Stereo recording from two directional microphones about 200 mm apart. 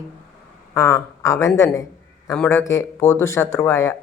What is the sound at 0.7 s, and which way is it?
A man's voice, 15° left (ahead or behind).